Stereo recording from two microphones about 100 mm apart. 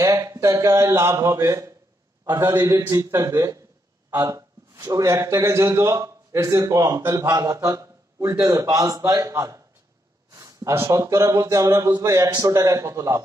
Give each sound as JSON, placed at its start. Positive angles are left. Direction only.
{"t": 0.0, "sound": "a man's voice", "side_deg": -35}
{"t": 2.2, "sound": "a man's voice", "side_deg": -45}
{"t": 2.6, "sound": "a man's voice", "side_deg": -30}
{"t": 7.2, "sound": "a man's voice", "side_deg": -40}
{"t": 10.3, "sound": "a sound", "side_deg": -35}
{"t": 10.7, "sound": "a man's voice", "side_deg": -25}